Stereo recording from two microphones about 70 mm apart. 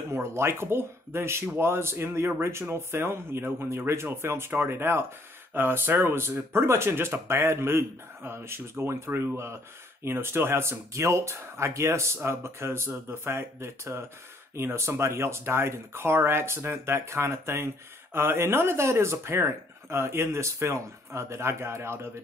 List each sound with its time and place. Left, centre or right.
0.1 s speech: right